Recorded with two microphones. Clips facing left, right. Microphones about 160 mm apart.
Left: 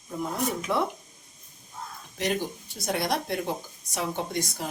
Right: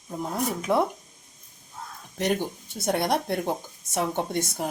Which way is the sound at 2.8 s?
55° right (ahead or behind).